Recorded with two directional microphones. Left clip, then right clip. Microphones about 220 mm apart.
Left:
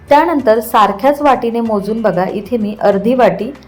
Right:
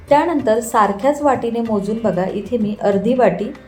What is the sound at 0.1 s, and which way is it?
Speech, 20° left (ahead or behind).